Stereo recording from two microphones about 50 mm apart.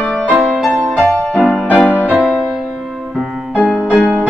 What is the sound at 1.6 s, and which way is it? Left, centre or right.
Music, centre.